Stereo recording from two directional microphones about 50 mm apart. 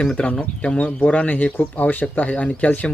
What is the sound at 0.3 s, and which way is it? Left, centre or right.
Speech, left.